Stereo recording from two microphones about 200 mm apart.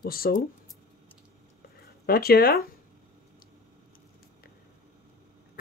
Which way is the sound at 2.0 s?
50° left (ahead or behind).